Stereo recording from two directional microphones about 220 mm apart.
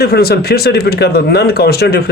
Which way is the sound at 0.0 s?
45° left (ahead or behind).